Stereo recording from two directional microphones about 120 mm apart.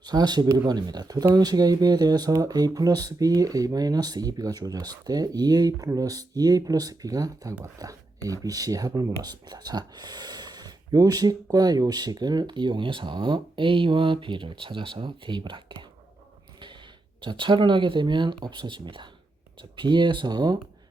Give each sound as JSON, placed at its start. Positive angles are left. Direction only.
{"t": 0.0, "sound": "speech", "side_deg": -35}
{"t": 17.2, "sound": "speech", "side_deg": -45}